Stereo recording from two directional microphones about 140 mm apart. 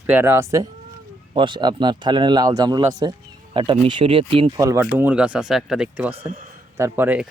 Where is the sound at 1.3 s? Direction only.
35° right (ahead or behind).